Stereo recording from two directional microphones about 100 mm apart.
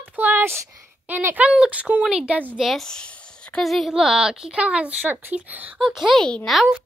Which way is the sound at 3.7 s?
Centre (ahead or behind).